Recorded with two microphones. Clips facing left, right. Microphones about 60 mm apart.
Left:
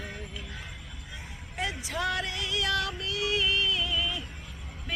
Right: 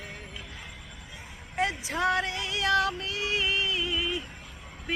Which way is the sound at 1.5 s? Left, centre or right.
Right.